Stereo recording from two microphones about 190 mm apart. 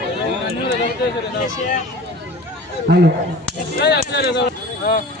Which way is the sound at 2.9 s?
65° right (ahead or behind).